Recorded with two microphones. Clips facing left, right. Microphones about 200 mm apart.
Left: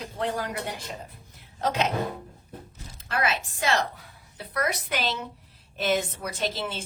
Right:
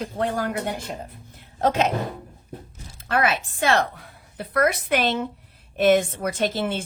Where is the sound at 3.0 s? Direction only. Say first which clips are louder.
Right 5 dB; 55° right (ahead or behind).